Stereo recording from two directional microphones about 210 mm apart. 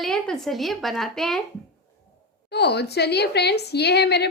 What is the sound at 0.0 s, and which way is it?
Speech, centre (ahead or behind).